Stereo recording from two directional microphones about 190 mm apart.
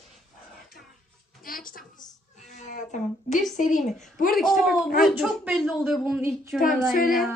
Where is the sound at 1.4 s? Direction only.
50° left (ahead or behind).